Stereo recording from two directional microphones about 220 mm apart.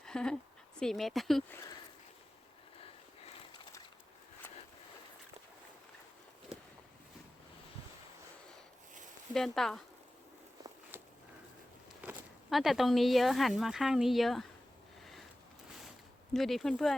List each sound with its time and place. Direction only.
0.0 s a sound: 5° left (ahead or behind)
0.8 s speech: centre (ahead or behind)
2.8 s a sound: 25° left (ahead or behind)
9.3 s speech: centre (ahead or behind)
12.0 s speech: centre (ahead or behind)
16.3 s speech: centre (ahead or behind)